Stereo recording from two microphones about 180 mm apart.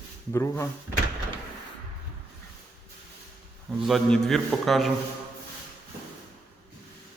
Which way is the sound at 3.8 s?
Centre (ahead or behind).